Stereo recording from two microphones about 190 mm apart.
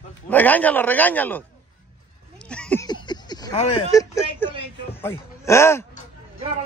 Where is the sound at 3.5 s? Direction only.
30° left (ahead or behind).